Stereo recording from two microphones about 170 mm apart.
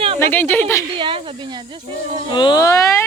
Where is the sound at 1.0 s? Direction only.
30° right (ahead or behind).